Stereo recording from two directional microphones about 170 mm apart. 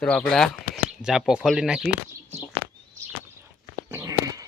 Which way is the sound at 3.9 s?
20° right (ahead or behind).